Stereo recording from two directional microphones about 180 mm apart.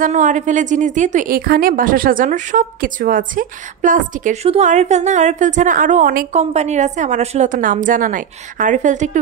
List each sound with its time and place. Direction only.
0.0 s a woman's voice: 45° right (ahead or behind)